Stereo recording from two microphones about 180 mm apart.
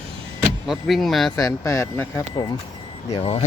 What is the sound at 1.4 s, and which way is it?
Speech, 20° left (ahead or behind).